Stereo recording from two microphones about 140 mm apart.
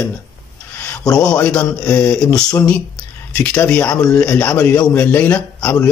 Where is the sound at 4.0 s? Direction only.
25° left (ahead or behind).